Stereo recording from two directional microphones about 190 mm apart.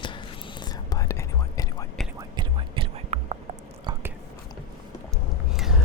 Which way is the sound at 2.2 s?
25° right (ahead or behind).